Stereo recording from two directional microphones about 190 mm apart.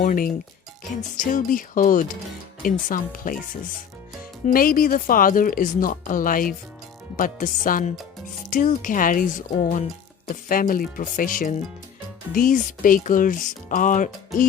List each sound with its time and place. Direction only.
0.0 s speech: 45° left (ahead or behind)
4.4 s speech: 50° left (ahead or behind)